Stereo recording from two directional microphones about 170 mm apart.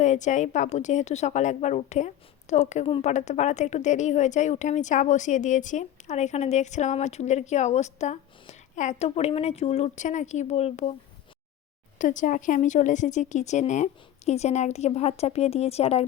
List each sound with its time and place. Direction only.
0.0 s a woman's voice: 45° left (ahead or behind)
11.9 s a woman's voice: 50° left (ahead or behind)